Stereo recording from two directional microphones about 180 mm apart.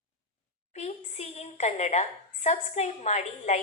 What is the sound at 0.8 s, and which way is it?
A woman's voice, 35° left (ahead or behind).